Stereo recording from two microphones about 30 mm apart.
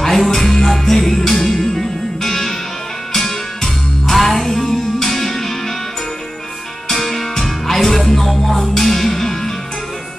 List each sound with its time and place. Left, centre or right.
0.0 s music: centre
6.9 s music: centre